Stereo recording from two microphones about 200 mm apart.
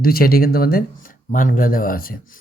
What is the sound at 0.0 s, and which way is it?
Speech, 50° left (ahead or behind).